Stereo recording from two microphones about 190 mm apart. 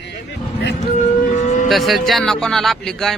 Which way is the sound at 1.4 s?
40° left (ahead or behind).